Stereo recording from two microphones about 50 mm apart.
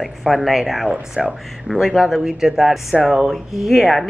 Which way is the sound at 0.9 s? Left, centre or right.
Right.